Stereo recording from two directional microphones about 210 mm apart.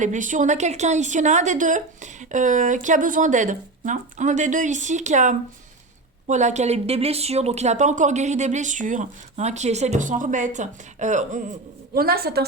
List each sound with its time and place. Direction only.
0.0 s speech: 35° right (ahead or behind)
11.9 s a woman's voice: 45° right (ahead or behind)